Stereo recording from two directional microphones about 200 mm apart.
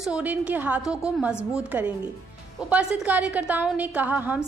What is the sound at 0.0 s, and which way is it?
A woman's voice, 5° right (ahead or behind).